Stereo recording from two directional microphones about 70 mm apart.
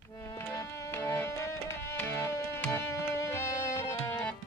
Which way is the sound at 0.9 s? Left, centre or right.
Left.